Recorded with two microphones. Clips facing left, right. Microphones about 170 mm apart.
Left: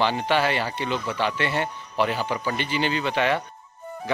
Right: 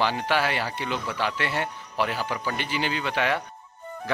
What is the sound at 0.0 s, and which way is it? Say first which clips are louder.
Speech: left 2 dB; 5° right (ahead or behind).